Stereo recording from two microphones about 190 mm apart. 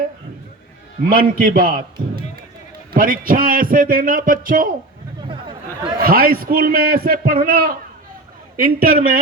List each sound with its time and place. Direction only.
1.0 s a man's voice: 50° right (ahead or behind)
5.3 s a sound: 25° right (ahead or behind)
6.0 s a man's voice: 50° right (ahead or behind)